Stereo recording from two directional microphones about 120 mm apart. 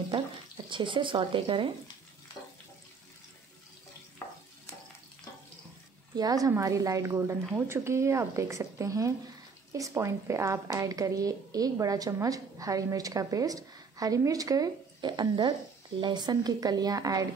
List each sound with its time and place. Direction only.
0.7 s speech: 45° right (ahead or behind)
6.1 s a woman's voice: 30° right (ahead or behind)